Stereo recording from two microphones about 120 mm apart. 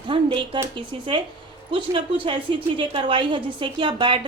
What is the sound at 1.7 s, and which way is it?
Speech, 45° right (ahead or behind).